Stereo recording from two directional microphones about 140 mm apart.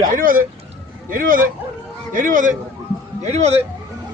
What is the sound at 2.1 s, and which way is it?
Speech, 70° right (ahead or behind).